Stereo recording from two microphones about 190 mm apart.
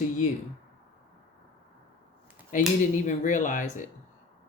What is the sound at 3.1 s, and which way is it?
Speech, 40° left (ahead or behind).